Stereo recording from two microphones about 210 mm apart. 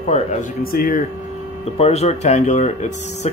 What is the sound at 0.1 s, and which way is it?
Speech, 40° left (ahead or behind).